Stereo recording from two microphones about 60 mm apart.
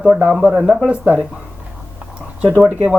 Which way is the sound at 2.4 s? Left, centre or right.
Right.